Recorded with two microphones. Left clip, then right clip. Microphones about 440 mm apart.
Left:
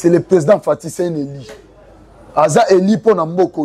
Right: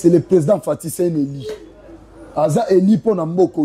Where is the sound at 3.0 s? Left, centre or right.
Centre.